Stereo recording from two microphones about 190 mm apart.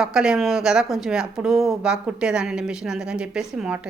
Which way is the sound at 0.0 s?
5° right (ahead or behind).